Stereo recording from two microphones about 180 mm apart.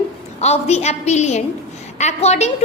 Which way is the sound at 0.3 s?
35° left (ahead or behind).